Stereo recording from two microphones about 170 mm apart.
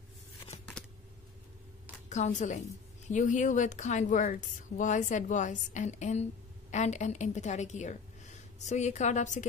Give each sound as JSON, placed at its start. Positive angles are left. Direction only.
{"t": 2.0, "sound": "a woman's voice", "side_deg": 45}